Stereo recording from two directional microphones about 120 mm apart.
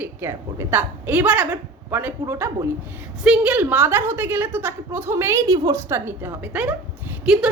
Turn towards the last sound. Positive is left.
turn(degrees=-5)  # may be behind; listen again after turning